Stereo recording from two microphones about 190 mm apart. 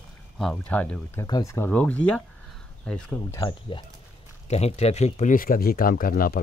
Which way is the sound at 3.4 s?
25° left (ahead or behind).